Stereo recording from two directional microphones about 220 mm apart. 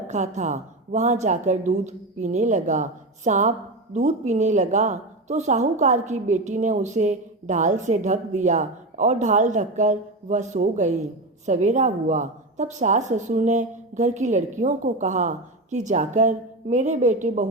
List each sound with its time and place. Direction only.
0.1 s a woman's voice: 30° right (ahead or behind)